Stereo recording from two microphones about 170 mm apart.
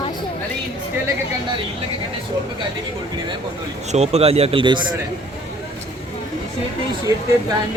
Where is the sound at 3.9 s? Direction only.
40° right (ahead or behind).